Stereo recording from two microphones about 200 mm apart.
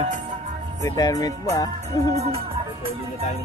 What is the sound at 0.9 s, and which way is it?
Music, 20° left (ahead or behind).